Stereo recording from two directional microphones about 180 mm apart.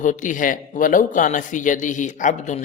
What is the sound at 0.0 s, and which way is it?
Speech, 45° left (ahead or behind).